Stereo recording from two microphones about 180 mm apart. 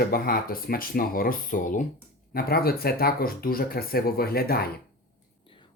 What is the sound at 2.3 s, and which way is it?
Speech, 60° left (ahead or behind).